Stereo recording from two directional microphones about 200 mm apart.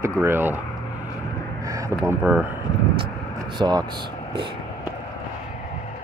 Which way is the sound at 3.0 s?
20° right (ahead or behind).